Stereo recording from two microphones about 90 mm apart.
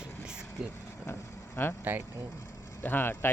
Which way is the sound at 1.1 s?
25° left (ahead or behind).